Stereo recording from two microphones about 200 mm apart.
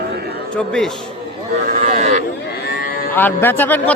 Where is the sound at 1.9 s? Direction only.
35° right (ahead or behind).